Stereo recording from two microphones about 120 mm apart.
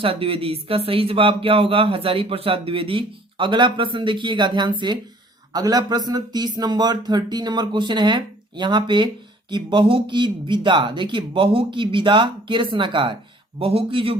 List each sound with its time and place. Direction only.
0.0 s speech: 50° right (ahead or behind)